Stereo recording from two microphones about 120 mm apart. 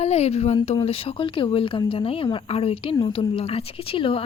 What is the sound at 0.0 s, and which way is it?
Speech, 60° left (ahead or behind).